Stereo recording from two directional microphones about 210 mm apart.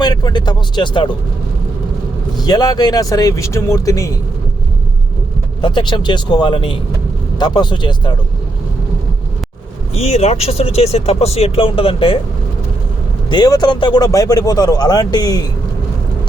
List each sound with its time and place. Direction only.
0.0 s speech: 20° left (ahead or behind)
2.5 s speech: 20° left (ahead or behind)
5.6 s speech: 20° left (ahead or behind)
9.9 s speech: 30° left (ahead or behind)
13.3 s speech: 20° left (ahead or behind)